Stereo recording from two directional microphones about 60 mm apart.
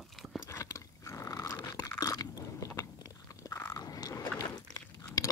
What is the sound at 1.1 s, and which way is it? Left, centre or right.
Dog, left.